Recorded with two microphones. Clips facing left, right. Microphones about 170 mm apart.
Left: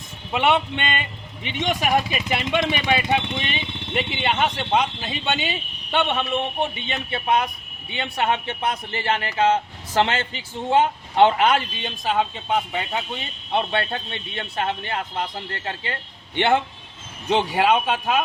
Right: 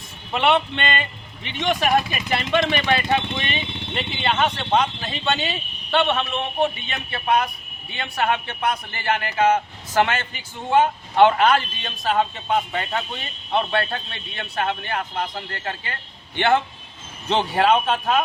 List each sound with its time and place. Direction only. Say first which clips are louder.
0.3 s a man's voice: right 1 dB; 10° left (ahead or behind)